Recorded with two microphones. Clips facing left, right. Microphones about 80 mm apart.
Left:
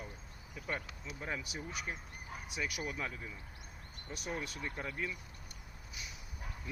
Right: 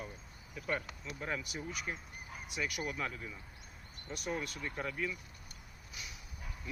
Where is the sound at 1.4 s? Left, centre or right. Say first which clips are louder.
Right 1 dB; left.